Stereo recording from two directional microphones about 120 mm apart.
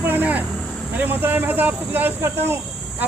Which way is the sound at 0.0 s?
15° right (ahead or behind).